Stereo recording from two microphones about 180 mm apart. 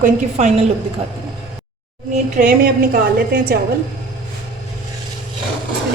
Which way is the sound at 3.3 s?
60° right (ahead or behind).